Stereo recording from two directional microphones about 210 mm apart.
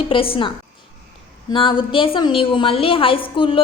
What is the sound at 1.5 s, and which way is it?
A woman's voice, 25° left (ahead or behind).